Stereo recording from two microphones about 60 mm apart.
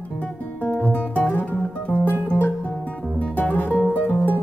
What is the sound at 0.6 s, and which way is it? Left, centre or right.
Music, left.